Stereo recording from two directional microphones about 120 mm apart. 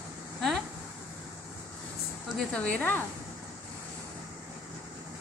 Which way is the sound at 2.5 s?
10° left (ahead or behind).